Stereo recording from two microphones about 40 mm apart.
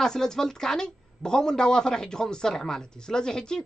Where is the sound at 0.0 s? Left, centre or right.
Centre.